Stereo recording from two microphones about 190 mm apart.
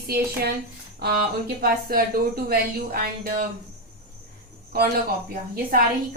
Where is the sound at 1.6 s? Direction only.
50° right (ahead or behind).